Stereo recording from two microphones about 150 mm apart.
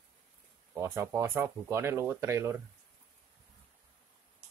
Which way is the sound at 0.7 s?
15° right (ahead or behind).